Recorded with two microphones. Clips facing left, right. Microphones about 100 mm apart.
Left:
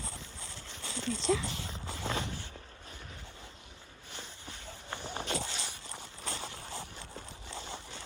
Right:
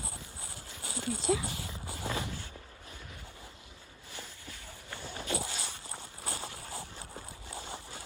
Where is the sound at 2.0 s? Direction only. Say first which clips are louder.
Even; 25° left (ahead or behind).